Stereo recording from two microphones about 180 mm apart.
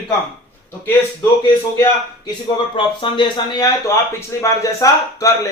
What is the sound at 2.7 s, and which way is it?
Speech, 30° left (ahead or behind).